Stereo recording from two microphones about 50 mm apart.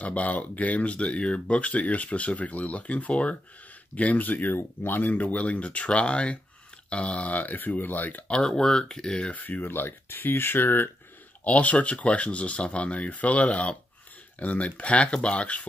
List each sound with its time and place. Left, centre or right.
0.0 s speech: left
5.1 s speech: left
8.3 s speech: centre
9.3 s speech: left
11.4 s speech: left